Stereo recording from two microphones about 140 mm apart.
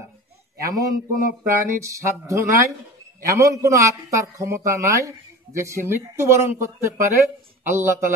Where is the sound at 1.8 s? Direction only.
20° right (ahead or behind).